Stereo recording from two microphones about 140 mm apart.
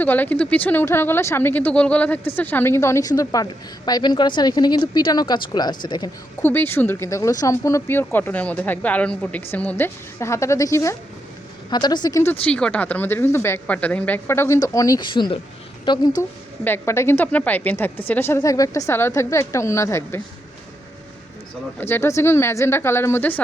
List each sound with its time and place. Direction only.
0.0 s speech: 10° left (ahead or behind); by 6.1 s 30° left (ahead or behind)
6.4 s speech: 15° left (ahead or behind)
12.5 s a woman's voice: 5° left (ahead or behind); by 16.0 s 35° left (ahead or behind)
16.6 s speech: 15° left (ahead or behind)
21.8 s speech: 15° left (ahead or behind)